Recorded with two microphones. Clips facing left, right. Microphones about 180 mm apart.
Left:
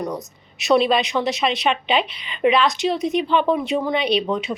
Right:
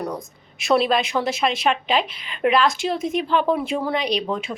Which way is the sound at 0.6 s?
Centre (ahead or behind).